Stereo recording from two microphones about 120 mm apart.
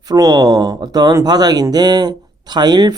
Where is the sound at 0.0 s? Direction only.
35° right (ahead or behind).